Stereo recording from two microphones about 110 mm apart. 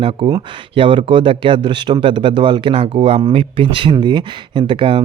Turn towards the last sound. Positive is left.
turn(degrees=-50)  # may be behind; listen again after turning